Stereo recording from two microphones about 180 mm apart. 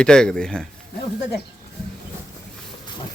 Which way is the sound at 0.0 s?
5° left (ahead or behind).